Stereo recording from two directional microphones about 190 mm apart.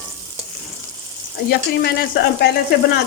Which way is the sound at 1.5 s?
55° left (ahead or behind).